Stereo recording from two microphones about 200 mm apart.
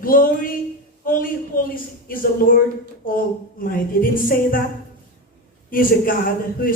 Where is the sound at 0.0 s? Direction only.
45° left (ahead or behind).